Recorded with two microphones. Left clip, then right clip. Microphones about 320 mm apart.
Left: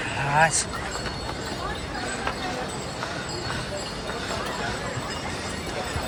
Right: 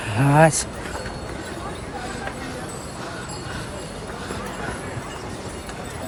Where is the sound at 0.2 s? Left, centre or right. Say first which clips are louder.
Right 5 dB; centre.